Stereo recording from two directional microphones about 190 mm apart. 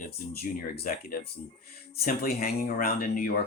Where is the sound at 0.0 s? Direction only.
50° left (ahead or behind).